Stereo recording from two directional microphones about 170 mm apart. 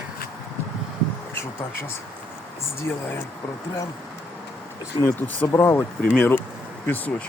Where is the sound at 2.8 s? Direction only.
10° left (ahead or behind).